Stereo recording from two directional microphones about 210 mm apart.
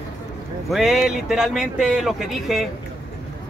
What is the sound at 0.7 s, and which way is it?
Speech, centre (ahead or behind).